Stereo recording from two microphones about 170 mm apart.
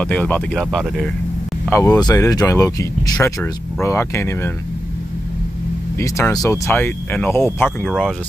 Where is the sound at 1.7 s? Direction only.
15° left (ahead or behind).